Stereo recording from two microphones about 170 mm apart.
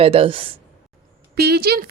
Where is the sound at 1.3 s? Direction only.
65° right (ahead or behind).